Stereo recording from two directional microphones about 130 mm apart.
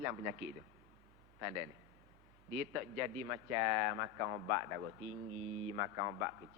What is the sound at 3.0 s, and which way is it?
A man's voice, 20° right (ahead or behind).